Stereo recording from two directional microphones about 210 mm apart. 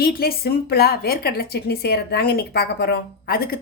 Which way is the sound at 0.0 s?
45° left (ahead or behind).